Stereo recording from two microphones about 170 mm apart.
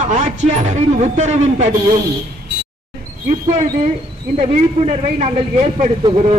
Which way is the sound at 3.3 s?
45° right (ahead or behind).